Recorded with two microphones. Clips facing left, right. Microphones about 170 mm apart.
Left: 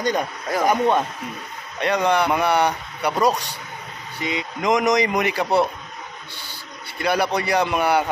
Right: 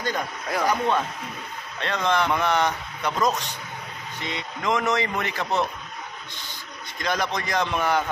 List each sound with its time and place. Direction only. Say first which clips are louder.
0.6 s a man's voice: left 4 dB; 20° left (ahead or behind)
7.0 s a man's voice: left 5 dB; 10° left (ahead or behind)